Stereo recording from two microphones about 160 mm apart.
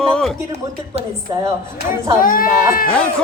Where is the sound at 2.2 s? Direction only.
60° left (ahead or behind).